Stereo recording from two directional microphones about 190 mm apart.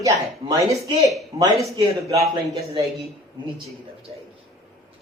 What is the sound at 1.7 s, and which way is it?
Speech, 35° right (ahead or behind).